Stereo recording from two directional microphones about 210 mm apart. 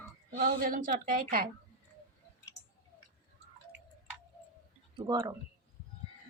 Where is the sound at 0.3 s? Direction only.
45° right (ahead or behind).